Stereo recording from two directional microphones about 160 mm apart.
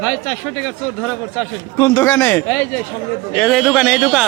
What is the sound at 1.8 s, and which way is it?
Speech, 15° left (ahead or behind).